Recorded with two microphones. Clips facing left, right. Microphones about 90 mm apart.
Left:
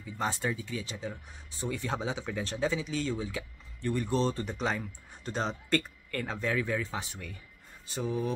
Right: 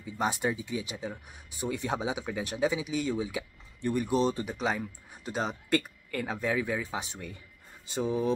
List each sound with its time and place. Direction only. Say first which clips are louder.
0.0 s speech: right 3 dB; 15° right (ahead or behind)